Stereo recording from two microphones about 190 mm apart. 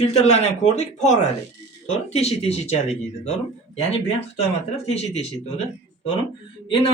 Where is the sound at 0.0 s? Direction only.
35° left (ahead or behind).